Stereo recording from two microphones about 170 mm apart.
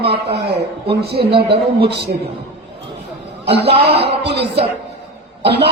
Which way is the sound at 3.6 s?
35° right (ahead or behind).